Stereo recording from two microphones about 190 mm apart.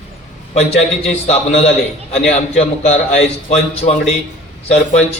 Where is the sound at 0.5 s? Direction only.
35° left (ahead or behind).